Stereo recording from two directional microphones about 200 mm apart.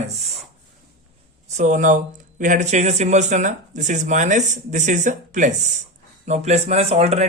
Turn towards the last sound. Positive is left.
turn(degrees=-30)  # may be behind; listen again after turning